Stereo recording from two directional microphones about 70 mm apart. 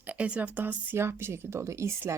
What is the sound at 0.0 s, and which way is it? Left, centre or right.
Speech, right.